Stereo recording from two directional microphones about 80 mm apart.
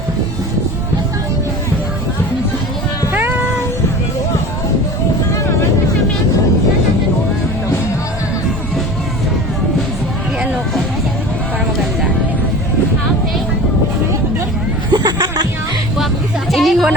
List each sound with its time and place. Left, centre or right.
3.2 s cat: right
5.3 s vehicle: left
14.9 s music: right
16.5 s a sound: centre